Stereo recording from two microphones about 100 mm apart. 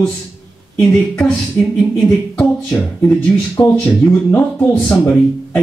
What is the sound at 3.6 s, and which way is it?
Speech, 15° left (ahead or behind).